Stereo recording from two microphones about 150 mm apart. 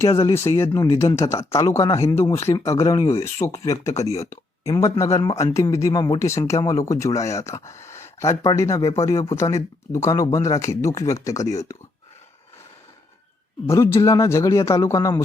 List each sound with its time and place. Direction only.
0.0 s speech: 20° left (ahead or behind)
13.7 s speech: 15° left (ahead or behind)